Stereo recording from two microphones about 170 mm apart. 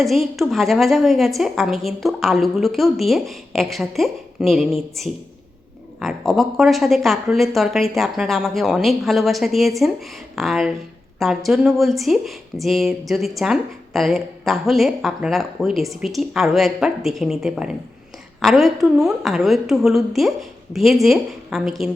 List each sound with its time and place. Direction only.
0.0 s speech: centre (ahead or behind)